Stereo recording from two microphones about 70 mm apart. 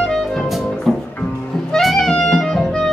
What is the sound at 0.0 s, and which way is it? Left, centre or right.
Music, centre.